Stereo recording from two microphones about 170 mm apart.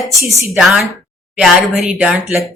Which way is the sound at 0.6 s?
Centre (ahead or behind).